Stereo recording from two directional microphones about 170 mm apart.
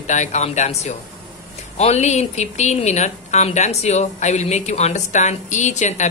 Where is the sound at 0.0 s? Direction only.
45° left (ahead or behind).